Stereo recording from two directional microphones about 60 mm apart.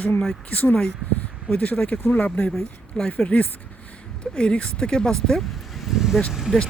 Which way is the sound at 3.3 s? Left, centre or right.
Left.